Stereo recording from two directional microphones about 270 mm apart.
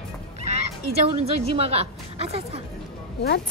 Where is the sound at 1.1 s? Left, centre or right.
Right.